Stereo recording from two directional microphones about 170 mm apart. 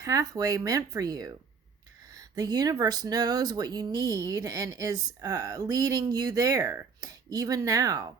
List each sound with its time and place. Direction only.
0.0 s speech: 20° right (ahead or behind)